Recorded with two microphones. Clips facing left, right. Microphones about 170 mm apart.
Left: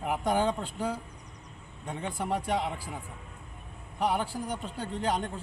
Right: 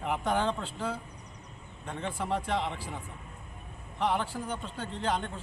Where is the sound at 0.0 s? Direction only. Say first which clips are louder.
Left 2 dB; 10° left (ahead or behind).